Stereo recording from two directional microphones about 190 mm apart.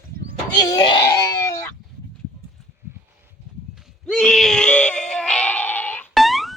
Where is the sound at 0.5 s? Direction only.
20° left (ahead or behind).